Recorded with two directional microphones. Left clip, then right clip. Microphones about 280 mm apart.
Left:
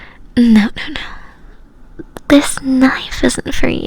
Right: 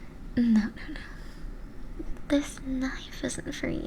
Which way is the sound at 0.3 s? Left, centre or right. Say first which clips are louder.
Left 15 dB; left.